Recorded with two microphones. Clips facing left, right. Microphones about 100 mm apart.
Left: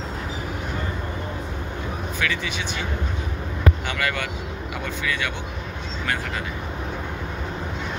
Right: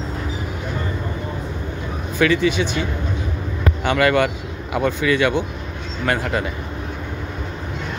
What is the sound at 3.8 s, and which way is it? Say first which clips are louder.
Speech: right 10 dB; 55° right (ahead or behind).